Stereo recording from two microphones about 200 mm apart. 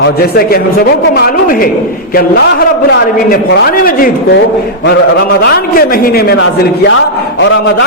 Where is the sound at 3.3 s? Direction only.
50° left (ahead or behind).